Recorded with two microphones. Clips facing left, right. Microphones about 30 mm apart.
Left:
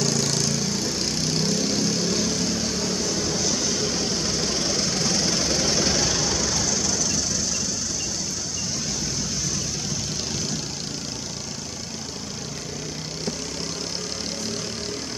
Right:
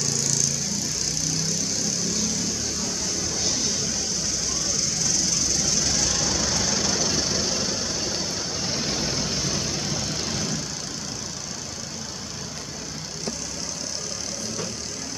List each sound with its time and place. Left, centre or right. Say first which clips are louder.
0.0 s vehicle: left 3 dB; left
2.1 s vehicle: left 3 dB; left
6.0 s vehicle: left 1 dB; centre
6.7 s vehicle: right 1 dB; right
8.7 s vehicle: right 3 dB; right